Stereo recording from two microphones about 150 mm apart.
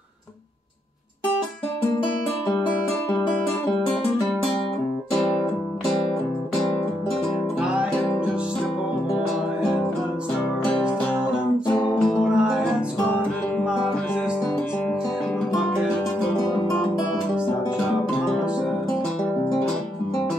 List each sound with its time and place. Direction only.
11.7 s music: centre (ahead or behind)